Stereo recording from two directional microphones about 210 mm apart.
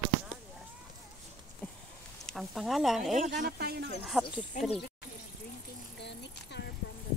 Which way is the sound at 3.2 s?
40° right (ahead or behind).